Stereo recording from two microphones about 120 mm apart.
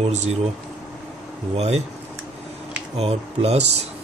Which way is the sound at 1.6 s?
65° right (ahead or behind).